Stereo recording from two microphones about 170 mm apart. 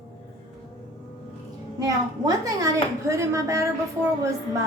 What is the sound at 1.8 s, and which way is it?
A woman's voice, 20° right (ahead or behind).